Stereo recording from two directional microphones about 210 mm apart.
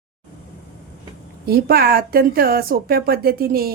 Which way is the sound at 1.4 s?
45° right (ahead or behind).